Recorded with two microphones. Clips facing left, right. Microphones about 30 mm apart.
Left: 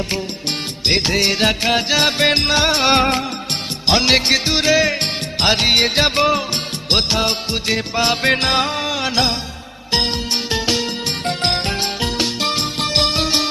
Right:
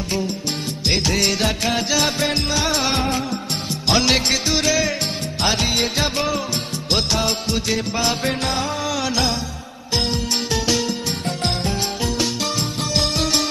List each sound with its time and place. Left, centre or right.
0.9 s music: left
1.4 s music: left
3.8 s music: left
5.4 s music: left
7.1 s music: left
8.0 s music: left
8.4 s music: left
8.8 s music: left
11.3 s music: left
13.0 s music: left